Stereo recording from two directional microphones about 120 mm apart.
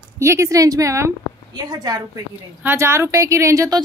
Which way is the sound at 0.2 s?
25° right (ahead or behind).